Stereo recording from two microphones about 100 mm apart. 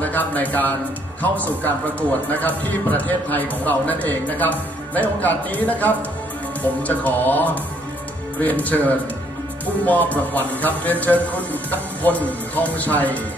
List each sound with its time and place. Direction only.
0.0 s a man's voice: 15° left (ahead or behind)